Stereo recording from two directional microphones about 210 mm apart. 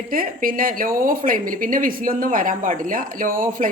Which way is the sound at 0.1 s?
40° right (ahead or behind).